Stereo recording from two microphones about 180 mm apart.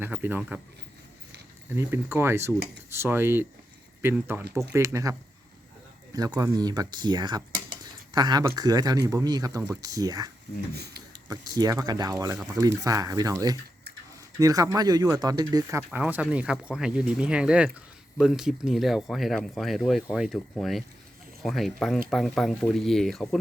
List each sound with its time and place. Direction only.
0.0 s speech: 10° right (ahead or behind)
1.7 s speech: 15° right (ahead or behind)
6.1 s speech: 20° right (ahead or behind)
10.8 s speech: 65° right (ahead or behind)
11.3 s speech: 20° right (ahead or behind)
12.3 s speech: 5° right (ahead or behind)
12.5 s speech: 20° right (ahead or behind)
15.9 s speech: 10° right (ahead or behind)